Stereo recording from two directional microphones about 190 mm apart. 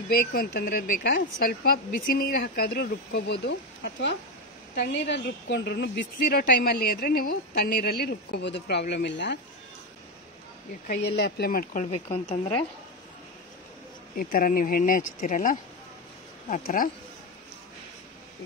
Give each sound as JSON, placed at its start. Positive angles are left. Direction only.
{"t": 0.3, "sound": "a woman's voice", "side_deg": 50}
{"t": 10.9, "sound": "speech", "side_deg": 60}
{"t": 14.1, "sound": "speech", "side_deg": 50}